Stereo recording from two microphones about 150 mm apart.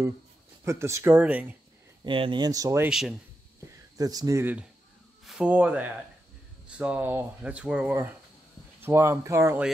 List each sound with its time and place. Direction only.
0.7 s speech: 20° right (ahead or behind)
2.0 s speech: 35° right (ahead or behind)
2.9 s speech: centre (ahead or behind)
4.0 s speech: 25° right (ahead or behind)
5.2 s speech: 5° right (ahead or behind)